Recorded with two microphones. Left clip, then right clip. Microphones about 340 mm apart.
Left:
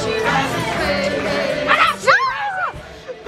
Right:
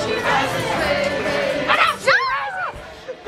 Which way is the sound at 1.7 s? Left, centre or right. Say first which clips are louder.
Left 2 dB; left.